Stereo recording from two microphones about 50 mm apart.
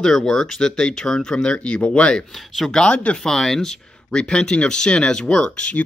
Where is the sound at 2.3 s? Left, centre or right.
Centre.